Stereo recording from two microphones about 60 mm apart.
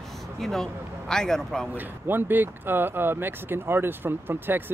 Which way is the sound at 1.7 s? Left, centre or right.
Right.